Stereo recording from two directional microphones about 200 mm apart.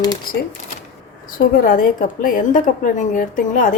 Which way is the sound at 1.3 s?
45° left (ahead or behind).